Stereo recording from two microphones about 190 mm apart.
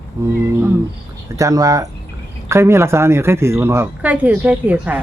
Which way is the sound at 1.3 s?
15° right (ahead or behind).